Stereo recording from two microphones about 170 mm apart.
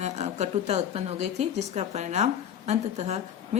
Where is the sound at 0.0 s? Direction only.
40° right (ahead or behind).